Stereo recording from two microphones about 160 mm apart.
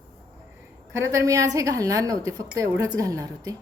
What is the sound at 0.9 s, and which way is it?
A woman's voice, 20° right (ahead or behind).